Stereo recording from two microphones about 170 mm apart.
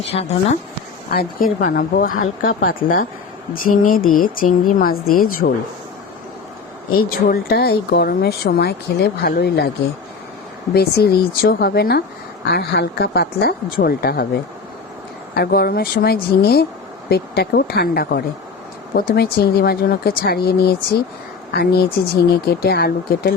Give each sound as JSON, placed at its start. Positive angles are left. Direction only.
{"t": 0.0, "sound": "a woman's voice", "side_deg": 35}
{"t": 1.1, "sound": "speech", "side_deg": 60}
{"t": 7.1, "sound": "speech", "side_deg": 60}
{"t": 10.8, "sound": "speech", "side_deg": 70}
{"t": 15.4, "sound": "speech", "side_deg": 65}